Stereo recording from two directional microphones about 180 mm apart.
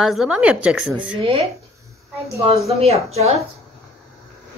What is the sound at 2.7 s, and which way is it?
Speech, 35° right (ahead or behind).